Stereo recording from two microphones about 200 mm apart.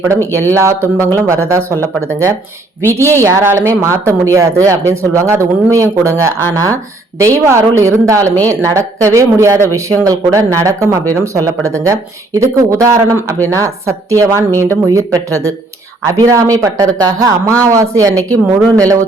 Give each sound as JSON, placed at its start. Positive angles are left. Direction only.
{"t": 0.1, "sound": "speech", "side_deg": -15}